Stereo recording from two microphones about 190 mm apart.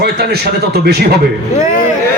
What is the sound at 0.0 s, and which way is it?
A man's voice, 60° right (ahead or behind).